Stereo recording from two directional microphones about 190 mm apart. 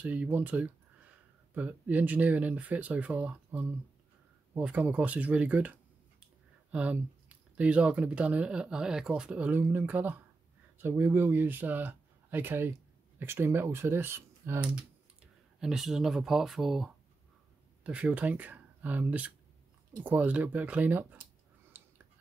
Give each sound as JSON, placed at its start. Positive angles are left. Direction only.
{"t": 0.0, "sound": "speech", "side_deg": -10}
{"t": 6.7, "sound": "speech", "side_deg": -5}
{"t": 21.7, "sound": "a sound", "side_deg": -10}